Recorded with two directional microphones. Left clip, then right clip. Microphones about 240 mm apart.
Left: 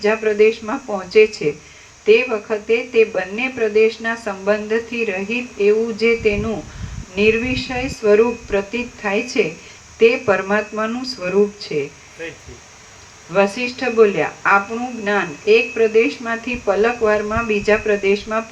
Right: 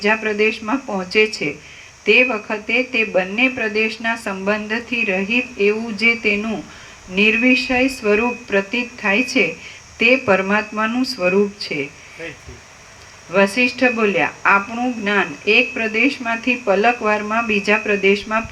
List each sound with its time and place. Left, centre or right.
0.0 s speech: right
13.3 s speech: right